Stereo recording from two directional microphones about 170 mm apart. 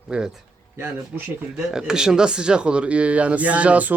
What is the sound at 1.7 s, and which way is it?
Speech, 5° right (ahead or behind).